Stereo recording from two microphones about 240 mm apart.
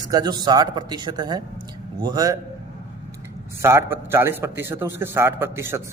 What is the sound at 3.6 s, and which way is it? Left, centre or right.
A man's voice, centre.